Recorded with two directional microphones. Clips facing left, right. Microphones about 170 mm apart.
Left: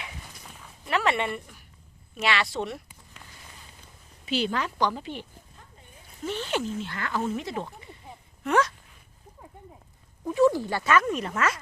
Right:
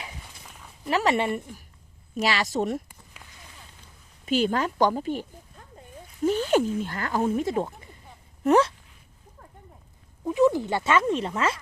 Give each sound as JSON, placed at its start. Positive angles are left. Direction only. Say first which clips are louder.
{"t": 0.9, "sound": "a woman's voice", "louder": "right 3 dB", "side_deg": -35}
{"t": 4.3, "sound": "speech", "louder": "right 4 dB", "side_deg": -45}
{"t": 6.2, "sound": "speech", "louder": "right 8 dB", "side_deg": -45}
{"t": 8.4, "sound": "a woman's voice", "louder": "right 5 dB", "side_deg": -35}
{"t": 10.2, "sound": "speech", "louder": "right 1 dB", "side_deg": -15}